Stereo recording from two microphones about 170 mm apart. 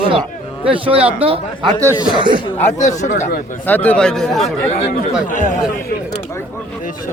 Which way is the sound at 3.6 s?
10° left (ahead or behind).